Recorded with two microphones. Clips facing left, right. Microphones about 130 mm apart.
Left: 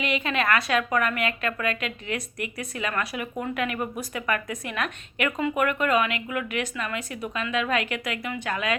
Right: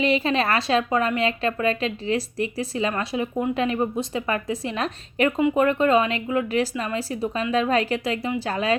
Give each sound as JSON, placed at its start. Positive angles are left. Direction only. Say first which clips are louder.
{"t": 0.0, "sound": "a woman's voice", "louder": "right 5 dB", "side_deg": -30}